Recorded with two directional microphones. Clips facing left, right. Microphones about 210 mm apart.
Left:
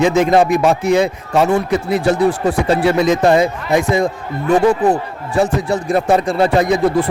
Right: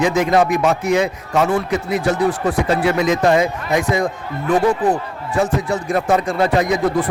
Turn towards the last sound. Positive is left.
turn(degrees=30)  # may be behind; listen again after turning